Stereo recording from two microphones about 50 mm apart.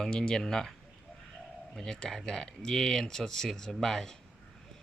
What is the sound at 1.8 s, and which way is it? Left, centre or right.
Speech, centre.